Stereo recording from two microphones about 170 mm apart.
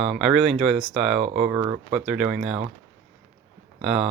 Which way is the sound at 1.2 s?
40° right (ahead or behind).